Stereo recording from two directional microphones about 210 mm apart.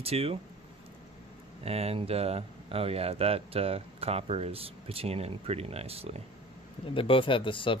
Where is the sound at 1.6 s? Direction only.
30° right (ahead or behind).